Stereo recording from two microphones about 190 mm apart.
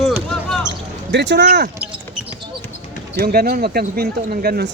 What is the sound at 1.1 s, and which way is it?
Speech, 70° right (ahead or behind).